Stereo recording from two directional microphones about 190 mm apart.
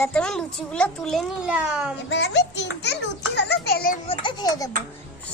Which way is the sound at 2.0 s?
65° left (ahead or behind).